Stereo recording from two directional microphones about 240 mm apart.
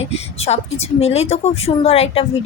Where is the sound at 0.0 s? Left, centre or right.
Left.